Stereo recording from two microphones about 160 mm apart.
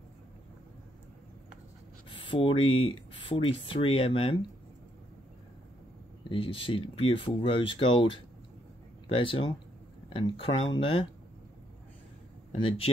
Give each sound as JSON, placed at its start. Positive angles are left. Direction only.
{"t": 2.0, "sound": "speech", "side_deg": 35}
{"t": 6.2, "sound": "speech", "side_deg": 35}
{"t": 12.5, "sound": "speech", "side_deg": 35}